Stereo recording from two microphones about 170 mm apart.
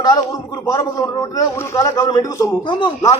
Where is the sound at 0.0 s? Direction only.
20° left (ahead or behind).